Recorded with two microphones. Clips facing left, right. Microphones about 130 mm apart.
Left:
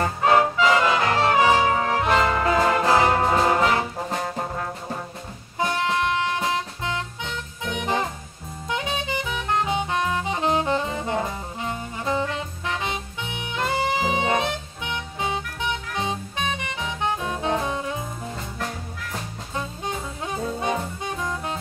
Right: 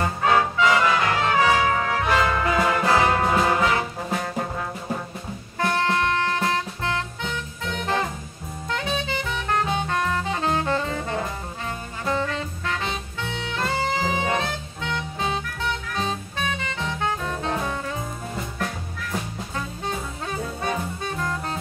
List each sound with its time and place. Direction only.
0.4 s music: 25° left (ahead or behind)
5.6 s music: 15° left (ahead or behind)
19.5 s music: 20° left (ahead or behind)